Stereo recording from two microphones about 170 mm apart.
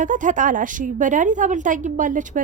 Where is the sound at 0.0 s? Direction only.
50° right (ahead or behind).